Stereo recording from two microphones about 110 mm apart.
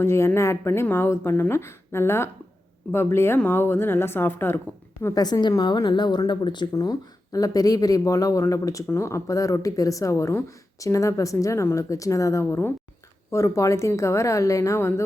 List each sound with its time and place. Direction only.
0.0 s speech: 25° left (ahead or behind)
5.1 s a woman's voice: 40° left (ahead or behind)
7.3 s speech: 35° left (ahead or behind)